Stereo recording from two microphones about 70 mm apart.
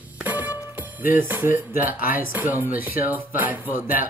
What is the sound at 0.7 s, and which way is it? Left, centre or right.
Speech, right.